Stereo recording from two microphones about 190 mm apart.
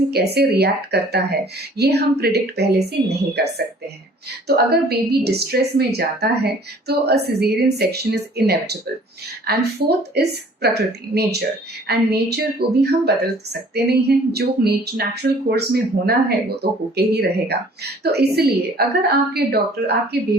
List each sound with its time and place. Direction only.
0.1 s a woman's voice: 60° right (ahead or behind)